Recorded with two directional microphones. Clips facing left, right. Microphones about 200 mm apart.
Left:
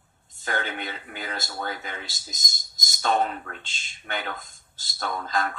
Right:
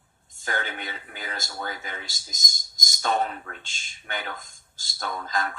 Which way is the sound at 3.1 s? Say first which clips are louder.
Left 2 dB; 45° left (ahead or behind).